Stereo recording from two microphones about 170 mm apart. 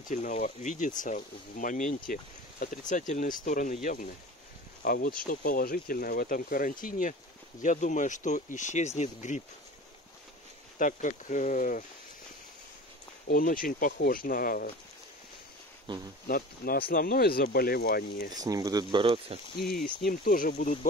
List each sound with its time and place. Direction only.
0.1 s speech: 50° left (ahead or behind)
10.8 s speech: 50° left (ahead or behind)
13.3 s speech: 55° left (ahead or behind)
16.3 s speech: 60° left (ahead or behind)
18.3 s speech: 20° right (ahead or behind)
20.0 s speech: 60° left (ahead or behind)